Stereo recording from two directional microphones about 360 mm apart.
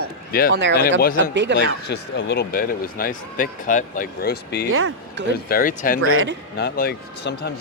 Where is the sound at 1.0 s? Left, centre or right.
Left.